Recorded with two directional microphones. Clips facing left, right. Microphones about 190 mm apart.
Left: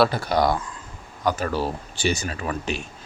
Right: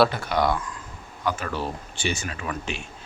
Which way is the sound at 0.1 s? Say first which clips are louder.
Left 2 dB; 35° left (ahead or behind).